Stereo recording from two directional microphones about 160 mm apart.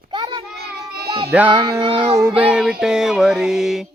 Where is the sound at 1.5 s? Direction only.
25° right (ahead or behind).